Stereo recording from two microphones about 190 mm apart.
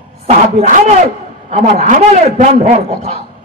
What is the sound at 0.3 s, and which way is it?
A man's voice, 40° right (ahead or behind).